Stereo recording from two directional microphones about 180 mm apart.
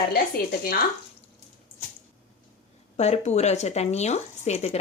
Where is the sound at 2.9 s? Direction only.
35° left (ahead or behind).